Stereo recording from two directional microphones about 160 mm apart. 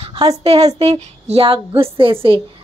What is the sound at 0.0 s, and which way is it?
A woman's voice, 40° right (ahead or behind).